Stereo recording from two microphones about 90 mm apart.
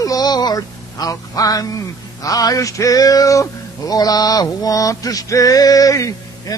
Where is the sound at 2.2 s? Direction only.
40° left (ahead or behind).